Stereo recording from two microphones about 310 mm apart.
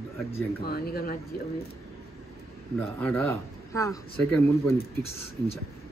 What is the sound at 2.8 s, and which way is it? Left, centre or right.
Speech, centre.